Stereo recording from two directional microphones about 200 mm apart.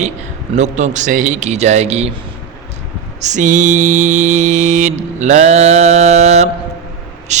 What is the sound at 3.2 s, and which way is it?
Mantra, 35° right (ahead or behind).